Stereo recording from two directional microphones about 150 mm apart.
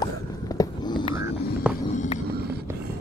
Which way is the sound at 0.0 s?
25° left (ahead or behind).